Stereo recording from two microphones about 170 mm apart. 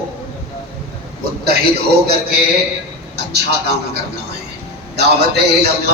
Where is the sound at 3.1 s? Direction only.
75° right (ahead or behind).